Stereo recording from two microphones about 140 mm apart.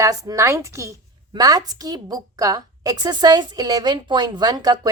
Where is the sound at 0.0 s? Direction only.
25° right (ahead or behind).